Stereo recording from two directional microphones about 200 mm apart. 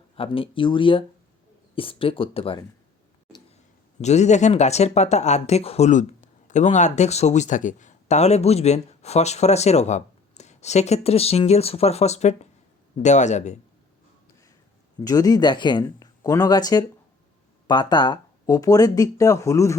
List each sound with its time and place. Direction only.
0.2 s speech: 25° left (ahead or behind)
4.0 s speech: 35° left (ahead or behind)
15.0 s speech: 20° left (ahead or behind)